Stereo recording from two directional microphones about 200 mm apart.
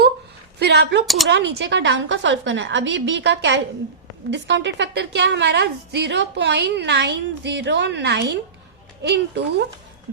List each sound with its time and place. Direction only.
0.6 s a woman's voice: 55° right (ahead or behind)
1.0 s speech: centre (ahead or behind)
1.3 s a woman's voice: 60° right (ahead or behind)